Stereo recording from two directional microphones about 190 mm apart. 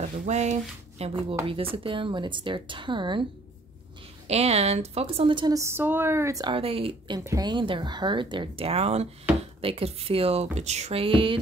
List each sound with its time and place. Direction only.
0.2 s a woman's voice: 40° right (ahead or behind)
4.3 s a woman's voice: 35° right (ahead or behind)
7.2 s a woman's voice: 20° right (ahead or behind)